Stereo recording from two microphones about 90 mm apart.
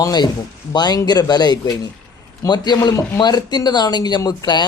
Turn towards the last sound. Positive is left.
turn(degrees=50)  # may be behind; listen again after turning